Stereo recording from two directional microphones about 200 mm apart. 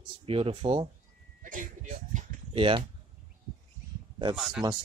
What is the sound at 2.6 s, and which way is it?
Speech, 25° right (ahead or behind).